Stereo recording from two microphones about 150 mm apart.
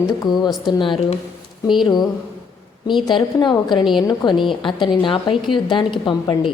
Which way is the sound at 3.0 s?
30° left (ahead or behind).